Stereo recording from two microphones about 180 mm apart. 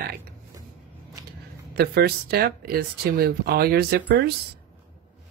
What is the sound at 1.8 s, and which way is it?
Speech, 60° right (ahead or behind).